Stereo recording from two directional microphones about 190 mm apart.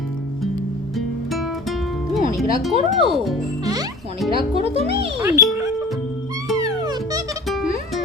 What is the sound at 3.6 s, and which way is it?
Music, 20° right (ahead or behind).